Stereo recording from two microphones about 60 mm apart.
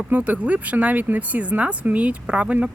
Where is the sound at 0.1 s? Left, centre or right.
Right.